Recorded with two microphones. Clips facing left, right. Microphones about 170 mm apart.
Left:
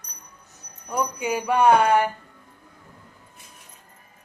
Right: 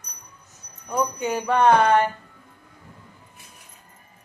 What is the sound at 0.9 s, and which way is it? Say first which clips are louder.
A woman's voice: right 1 dB; 10° left (ahead or behind).